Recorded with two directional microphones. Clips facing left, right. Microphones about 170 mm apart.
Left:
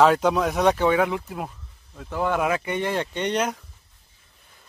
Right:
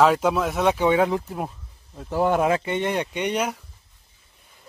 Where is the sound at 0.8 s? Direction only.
30° right (ahead or behind); by 3.6 s 10° right (ahead or behind).